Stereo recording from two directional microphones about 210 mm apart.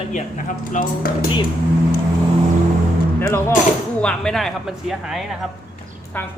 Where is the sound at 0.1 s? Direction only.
35° left (ahead or behind).